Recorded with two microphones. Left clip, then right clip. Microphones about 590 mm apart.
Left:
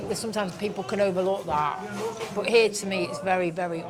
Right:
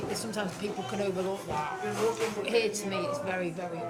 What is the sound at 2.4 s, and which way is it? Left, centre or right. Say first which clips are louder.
Speech: left 7 dB; left.